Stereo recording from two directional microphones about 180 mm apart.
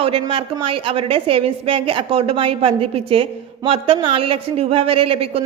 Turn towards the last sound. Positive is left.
turn(degrees=-30)  # may be behind; listen again after turning